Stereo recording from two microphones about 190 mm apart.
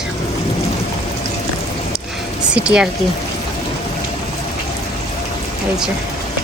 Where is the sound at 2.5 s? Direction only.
5° right (ahead or behind).